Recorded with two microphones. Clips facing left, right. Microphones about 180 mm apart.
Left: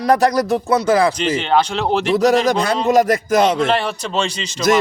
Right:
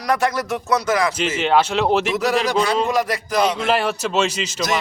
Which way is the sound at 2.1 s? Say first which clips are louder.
Left 5 dB; 40° left (ahead or behind).